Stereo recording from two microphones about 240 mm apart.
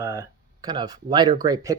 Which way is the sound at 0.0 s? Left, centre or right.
Centre.